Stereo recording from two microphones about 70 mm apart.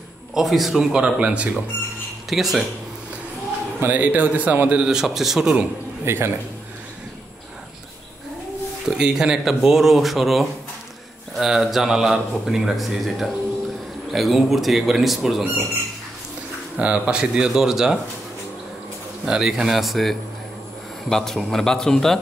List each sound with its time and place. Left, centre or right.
0.3 s speech: centre
2.2 s speech: centre
3.8 s a man's voice: right
4.8 s speech: centre
6.0 s a man's voice: right
8.9 s speech: centre
16.7 s speech: centre
19.2 s a man's voice: centre